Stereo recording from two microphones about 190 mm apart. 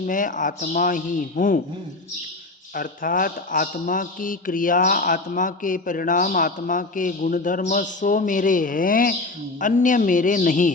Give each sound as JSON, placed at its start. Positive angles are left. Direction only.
{"t": 0.0, "sound": "a man's voice", "side_deg": 45}
{"t": 2.7, "sound": "a man's voice", "side_deg": 45}